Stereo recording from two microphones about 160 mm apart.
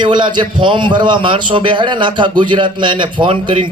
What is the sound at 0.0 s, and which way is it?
A man's voice, 30° right (ahead or behind).